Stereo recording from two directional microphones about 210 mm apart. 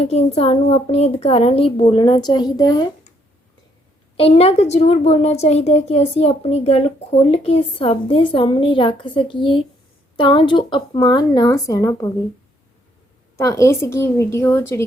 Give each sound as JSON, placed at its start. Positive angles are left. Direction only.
{"t": 0.1, "sound": "a woman's voice", "side_deg": 30}
{"t": 4.2, "sound": "a woman's voice", "side_deg": 30}
{"t": 13.3, "sound": "speech", "side_deg": 15}